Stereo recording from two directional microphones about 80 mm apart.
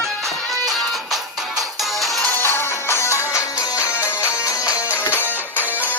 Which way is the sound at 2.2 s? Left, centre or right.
Left.